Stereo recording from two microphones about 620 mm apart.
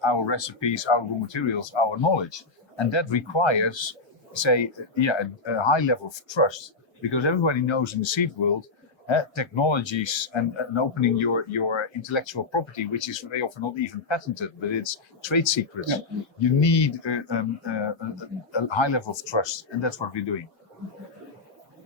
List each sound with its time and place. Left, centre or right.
0.0 s speech: left